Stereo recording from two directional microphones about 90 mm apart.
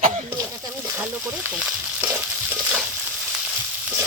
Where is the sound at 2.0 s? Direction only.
15° right (ahead or behind).